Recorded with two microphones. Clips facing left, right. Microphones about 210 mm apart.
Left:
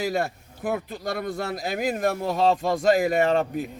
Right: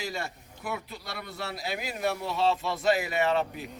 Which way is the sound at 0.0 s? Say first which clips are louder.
Left 9 dB; 55° left (ahead or behind).